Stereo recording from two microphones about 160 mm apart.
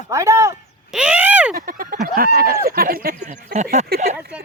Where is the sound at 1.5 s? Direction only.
60° right (ahead or behind).